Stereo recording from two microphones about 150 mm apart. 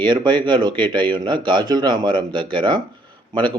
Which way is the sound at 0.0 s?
30° right (ahead or behind).